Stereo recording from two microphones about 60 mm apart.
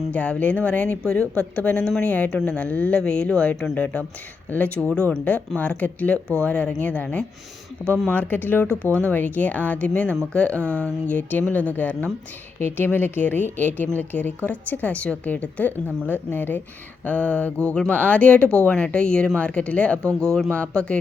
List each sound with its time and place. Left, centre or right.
0.1 s a woman's voice: left
12.5 s a woman's voice: left
20.1 s speech: centre
20.5 s a woman's voice: left